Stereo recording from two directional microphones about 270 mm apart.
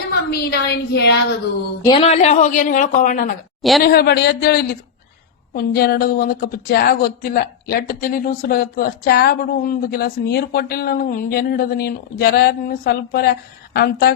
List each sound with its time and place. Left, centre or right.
0.1 s a woman's voice: left
1.8 s speech: left
3.6 s a woman's voice: centre
3.8 s speech: left